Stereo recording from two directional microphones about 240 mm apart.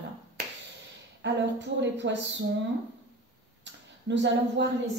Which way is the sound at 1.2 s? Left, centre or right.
Right.